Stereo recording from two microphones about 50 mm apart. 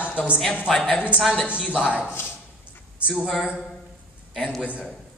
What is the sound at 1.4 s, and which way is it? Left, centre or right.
Speech, right.